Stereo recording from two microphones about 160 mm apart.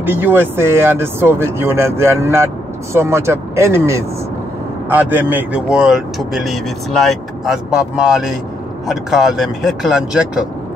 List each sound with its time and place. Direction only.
0.0 s speech: 10° right (ahead or behind)